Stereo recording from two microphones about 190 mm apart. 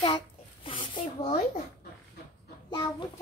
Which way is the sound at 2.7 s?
25° left (ahead or behind).